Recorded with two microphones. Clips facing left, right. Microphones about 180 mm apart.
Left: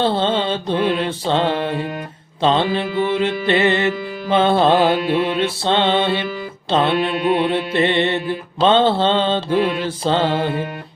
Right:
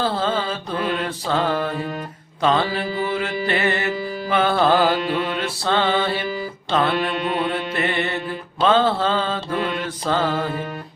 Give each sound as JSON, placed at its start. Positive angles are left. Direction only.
{"t": 0.0, "sound": "music", "side_deg": 25}
{"t": 0.9, "sound": "mantra", "side_deg": 25}
{"t": 4.8, "sound": "music", "side_deg": 0}
{"t": 5.4, "sound": "mantra", "side_deg": 25}
{"t": 7.2, "sound": "mantra", "side_deg": 10}
{"t": 7.5, "sound": "mantra", "side_deg": 25}